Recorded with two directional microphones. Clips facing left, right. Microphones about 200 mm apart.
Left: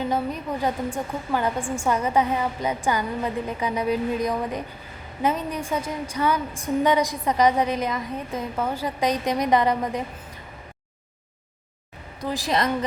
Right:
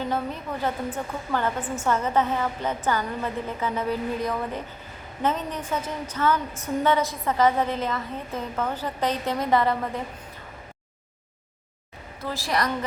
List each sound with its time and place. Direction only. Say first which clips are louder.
0.1 s a woman's voice: left 3 dB; 15° left (ahead or behind)
12.2 s a woman's voice: left 3 dB; 15° left (ahead or behind)